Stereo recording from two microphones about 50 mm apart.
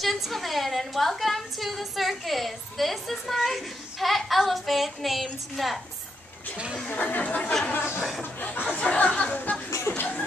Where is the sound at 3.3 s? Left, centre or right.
Centre.